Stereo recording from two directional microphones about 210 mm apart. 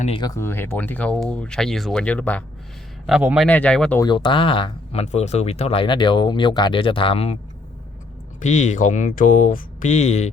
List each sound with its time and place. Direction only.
0.0 s speech: 25° left (ahead or behind); by 2.4 s 5° left (ahead or behind)
3.1 s a man's voice: 5° right (ahead or behind)
4.0 s speech: 20° left (ahead or behind)
8.4 s speech: 35° left (ahead or behind)